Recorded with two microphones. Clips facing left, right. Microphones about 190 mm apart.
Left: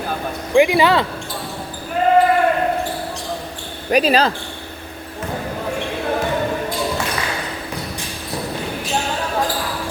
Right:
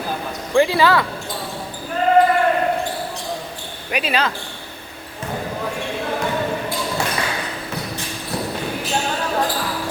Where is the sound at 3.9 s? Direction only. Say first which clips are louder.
Left 6 dB; 40° left (ahead or behind).